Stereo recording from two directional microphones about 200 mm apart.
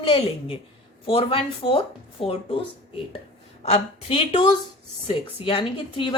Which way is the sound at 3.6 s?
30° left (ahead or behind).